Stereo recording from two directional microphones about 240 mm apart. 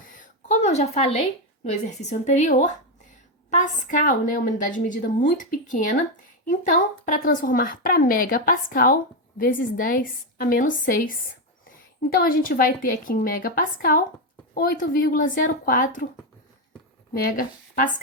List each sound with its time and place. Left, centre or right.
0.1 s a sound: left
1.7 s a woman's voice: left
12.1 s a woman's voice: left
17.2 s a woman's voice: left